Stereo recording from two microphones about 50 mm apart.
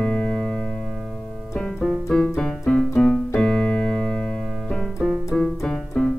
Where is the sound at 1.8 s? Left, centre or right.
Centre.